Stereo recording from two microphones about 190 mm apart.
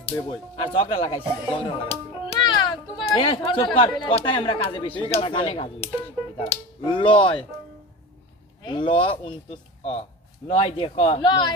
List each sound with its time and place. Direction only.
0.3 s speech: 30° left (ahead or behind)
2.4 s children playing: 25° left (ahead or behind)
3.2 s speech: 25° left (ahead or behind)
8.6 s speech: 25° left (ahead or behind)